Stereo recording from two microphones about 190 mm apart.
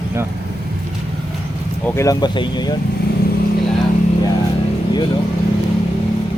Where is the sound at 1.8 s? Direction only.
15° left (ahead or behind).